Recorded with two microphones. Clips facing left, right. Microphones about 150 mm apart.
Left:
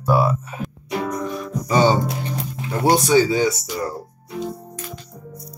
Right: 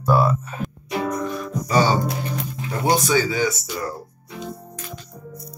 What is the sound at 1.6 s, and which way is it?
Speech, 20° left (ahead or behind).